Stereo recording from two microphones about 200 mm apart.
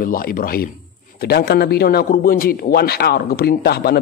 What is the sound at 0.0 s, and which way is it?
A man's voice, 45° left (ahead or behind).